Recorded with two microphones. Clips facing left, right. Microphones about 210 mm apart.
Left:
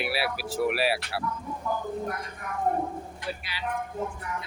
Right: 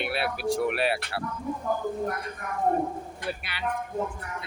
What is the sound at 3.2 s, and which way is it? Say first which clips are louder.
Speech: right 2 dB; 60° right (ahead or behind).